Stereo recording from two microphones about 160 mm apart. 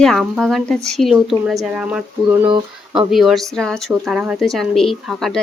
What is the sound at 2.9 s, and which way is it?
Speech, centre (ahead or behind).